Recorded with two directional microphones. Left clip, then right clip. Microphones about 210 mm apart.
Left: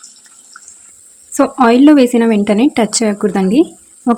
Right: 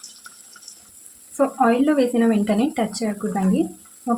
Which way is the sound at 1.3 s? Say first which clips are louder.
Left 8 dB; 50° left (ahead or behind).